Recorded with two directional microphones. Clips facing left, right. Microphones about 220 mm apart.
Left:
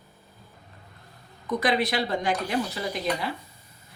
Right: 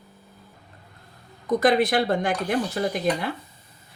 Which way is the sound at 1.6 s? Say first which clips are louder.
Right 5 dB; 45° right (ahead or behind).